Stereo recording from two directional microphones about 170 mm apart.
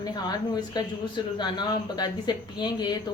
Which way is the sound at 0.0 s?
25° left (ahead or behind).